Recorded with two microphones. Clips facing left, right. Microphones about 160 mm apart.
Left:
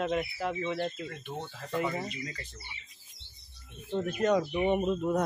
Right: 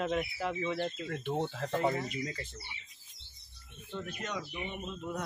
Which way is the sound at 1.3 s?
70° right (ahead or behind).